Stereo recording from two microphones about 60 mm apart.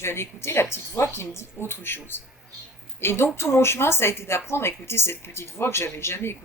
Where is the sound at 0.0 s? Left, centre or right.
Left.